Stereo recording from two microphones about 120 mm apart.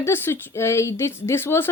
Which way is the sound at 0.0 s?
20° left (ahead or behind).